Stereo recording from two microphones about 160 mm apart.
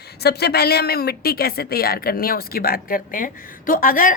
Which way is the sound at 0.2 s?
90° left.